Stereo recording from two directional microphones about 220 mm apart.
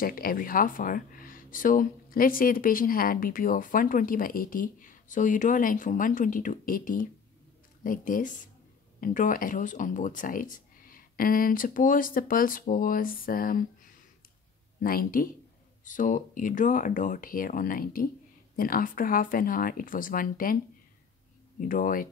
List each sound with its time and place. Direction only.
0.0 s speech: 40° left (ahead or behind)
14.8 s speech: 40° left (ahead or behind)
21.5 s speech: 40° left (ahead or behind)